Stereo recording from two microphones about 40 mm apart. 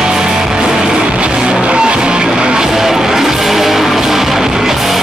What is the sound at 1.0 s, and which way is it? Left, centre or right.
Music, right.